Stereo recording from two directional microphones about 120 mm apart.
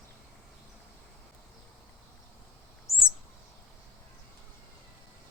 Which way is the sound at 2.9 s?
25° left (ahead or behind).